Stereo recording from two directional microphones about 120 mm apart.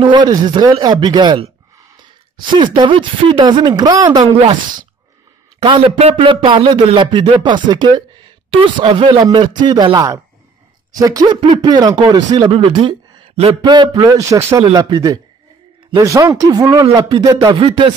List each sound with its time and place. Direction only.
0.0 s speech: 40° right (ahead or behind)
5.6 s speech: 50° right (ahead or behind)
9.2 s speech: 35° right (ahead or behind)
17.6 s speech: 50° right (ahead or behind)